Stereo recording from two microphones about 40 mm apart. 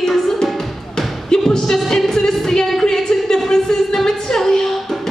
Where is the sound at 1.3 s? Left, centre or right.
Centre.